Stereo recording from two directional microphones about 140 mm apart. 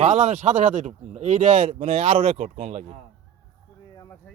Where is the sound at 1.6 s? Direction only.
45° right (ahead or behind).